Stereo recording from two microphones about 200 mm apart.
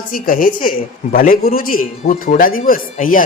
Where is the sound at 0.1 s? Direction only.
45° left (ahead or behind).